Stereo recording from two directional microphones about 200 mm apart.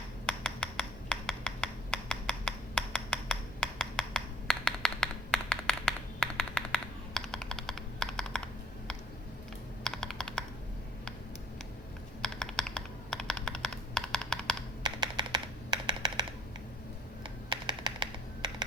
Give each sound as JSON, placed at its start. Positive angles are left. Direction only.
{"t": 0.3, "sound": "a sound", "side_deg": 5}
{"t": 9.8, "sound": "computer keyboard", "side_deg": 5}
{"t": 12.2, "sound": "computer keyboard", "side_deg": 5}
{"t": 14.8, "sound": "typing", "side_deg": -25}
{"t": 17.2, "sound": "typing", "side_deg": -20}